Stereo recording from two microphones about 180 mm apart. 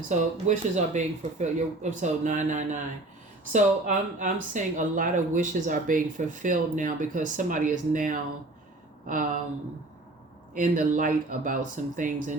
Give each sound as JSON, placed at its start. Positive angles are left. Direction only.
{"t": 0.1, "sound": "speech", "side_deg": -40}
{"t": 10.5, "sound": "speech", "side_deg": -45}